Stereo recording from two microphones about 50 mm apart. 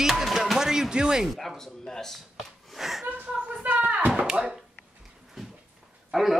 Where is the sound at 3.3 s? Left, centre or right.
Right.